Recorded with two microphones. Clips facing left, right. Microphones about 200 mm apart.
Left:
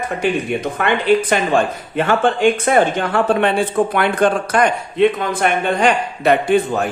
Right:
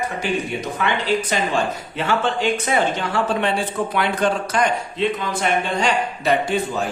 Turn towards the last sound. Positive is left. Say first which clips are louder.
# left 6 dB
turn(degrees=60)  # may be behind; listen again after turning